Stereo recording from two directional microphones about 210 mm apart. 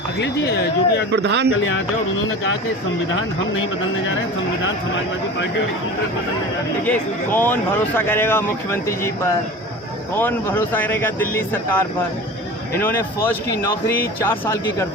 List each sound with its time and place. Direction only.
0.2 s speech: 55° left (ahead or behind)
1.1 s speech: 55° right (ahead or behind)
6.8 s speech: 10° left (ahead or behind)